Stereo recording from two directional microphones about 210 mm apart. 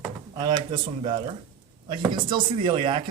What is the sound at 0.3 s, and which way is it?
Speech, 20° right (ahead or behind).